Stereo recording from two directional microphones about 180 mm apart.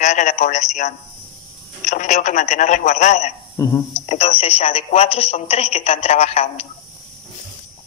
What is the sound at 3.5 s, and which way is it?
Speech, 15° left (ahead or behind).